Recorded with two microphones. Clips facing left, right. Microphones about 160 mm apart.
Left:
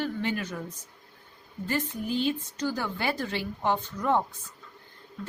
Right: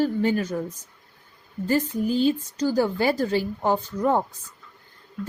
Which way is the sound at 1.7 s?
40° right (ahead or behind).